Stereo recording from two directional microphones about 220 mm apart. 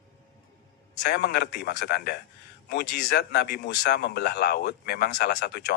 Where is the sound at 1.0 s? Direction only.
45° left (ahead or behind).